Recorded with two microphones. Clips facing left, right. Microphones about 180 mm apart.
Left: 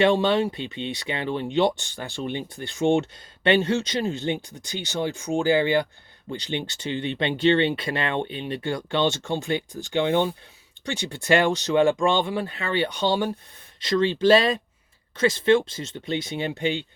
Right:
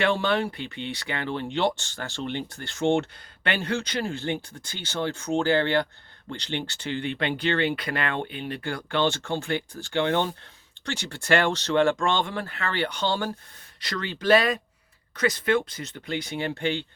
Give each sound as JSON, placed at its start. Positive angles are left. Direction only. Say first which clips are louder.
{"t": 0.0, "sound": "speech", "louder": "left 4 dB", "side_deg": 20}